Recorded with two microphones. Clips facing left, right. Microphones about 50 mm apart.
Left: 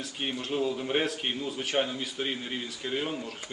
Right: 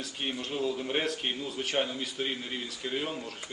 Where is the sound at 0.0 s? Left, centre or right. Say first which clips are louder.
Left 1 dB; centre.